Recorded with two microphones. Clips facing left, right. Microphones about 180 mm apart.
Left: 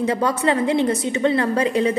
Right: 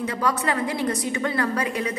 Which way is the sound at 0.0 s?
30° left (ahead or behind).